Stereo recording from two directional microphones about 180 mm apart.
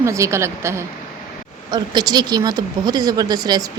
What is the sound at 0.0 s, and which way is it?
A woman's voice, 15° right (ahead or behind).